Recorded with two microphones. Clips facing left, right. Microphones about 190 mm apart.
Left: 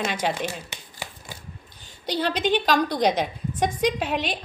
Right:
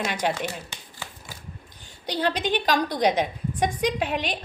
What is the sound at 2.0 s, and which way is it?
A woman's voice, 15° right (ahead or behind).